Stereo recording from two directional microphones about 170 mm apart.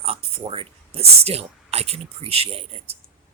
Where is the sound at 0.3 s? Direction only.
35° right (ahead or behind).